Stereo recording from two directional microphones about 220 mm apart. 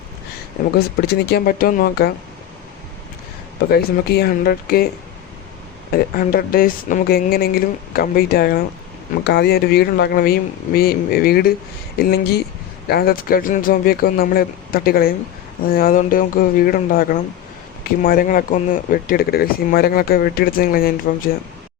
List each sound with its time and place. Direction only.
1.0 s speech: 45° left (ahead or behind)
3.7 s speech: 45° left (ahead or behind)
5.9 s speech: 40° left (ahead or behind)